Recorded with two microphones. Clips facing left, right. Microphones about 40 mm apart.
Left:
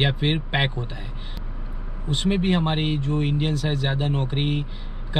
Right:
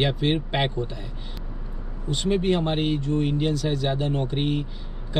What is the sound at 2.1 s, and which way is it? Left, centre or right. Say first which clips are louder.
Speech: even; left.